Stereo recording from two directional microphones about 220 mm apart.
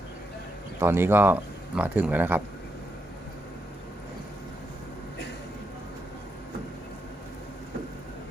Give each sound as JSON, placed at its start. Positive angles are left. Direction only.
{"t": 0.8, "sound": "speech", "side_deg": -10}